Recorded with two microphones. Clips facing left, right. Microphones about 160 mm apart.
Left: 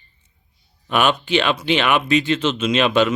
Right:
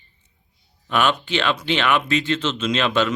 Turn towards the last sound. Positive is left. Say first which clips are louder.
# left 4 dB
turn(degrees=15)  # may be behind; listen again after turning